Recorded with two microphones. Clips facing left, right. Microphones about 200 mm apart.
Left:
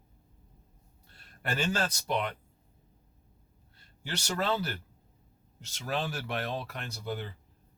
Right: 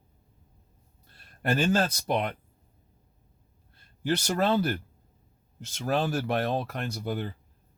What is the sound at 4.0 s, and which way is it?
Speech, 50° right (ahead or behind).